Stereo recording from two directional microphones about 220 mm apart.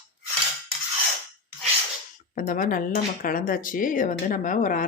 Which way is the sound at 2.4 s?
40° left (ahead or behind).